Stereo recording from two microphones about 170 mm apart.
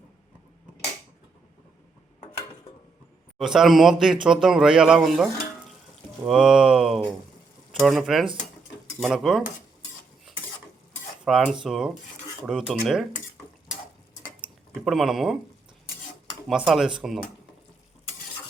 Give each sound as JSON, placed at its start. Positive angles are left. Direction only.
{"t": 3.3, "sound": "speech", "side_deg": 0}
{"t": 11.3, "sound": "speech", "side_deg": 0}
{"t": 14.8, "sound": "speech", "side_deg": 0}
{"t": 16.5, "sound": "speech", "side_deg": -5}